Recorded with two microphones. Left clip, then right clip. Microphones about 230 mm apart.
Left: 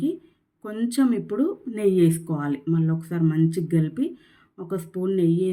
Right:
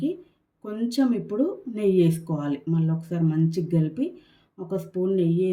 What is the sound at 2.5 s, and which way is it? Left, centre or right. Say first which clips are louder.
Speech: left 3 dB; right.